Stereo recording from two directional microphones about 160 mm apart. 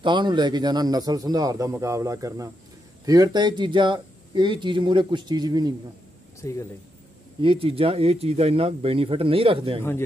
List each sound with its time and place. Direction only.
0.0 s speech: 30° right (ahead or behind)
6.4 s speech: 20° left (ahead or behind)
7.4 s speech: 35° right (ahead or behind)